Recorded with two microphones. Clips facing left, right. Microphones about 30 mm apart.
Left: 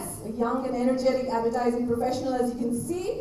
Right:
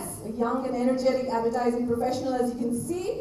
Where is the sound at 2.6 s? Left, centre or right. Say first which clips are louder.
Even; centre.